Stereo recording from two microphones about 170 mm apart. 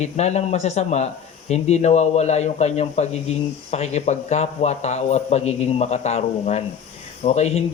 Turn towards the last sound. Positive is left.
turn(degrees=40)  # may be behind; listen again after turning